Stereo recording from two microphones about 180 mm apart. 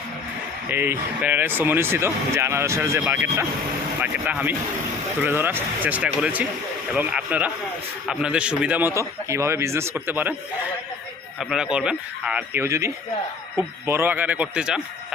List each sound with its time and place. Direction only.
0.7 s speech: 10° right (ahead or behind)
11.3 s speech: 5° right (ahead or behind)